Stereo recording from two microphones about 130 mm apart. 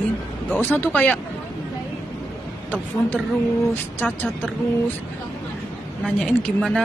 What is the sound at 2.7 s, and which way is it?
A woman's voice, 10° left (ahead or behind).